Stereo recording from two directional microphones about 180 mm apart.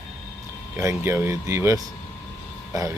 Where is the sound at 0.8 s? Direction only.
15° right (ahead or behind).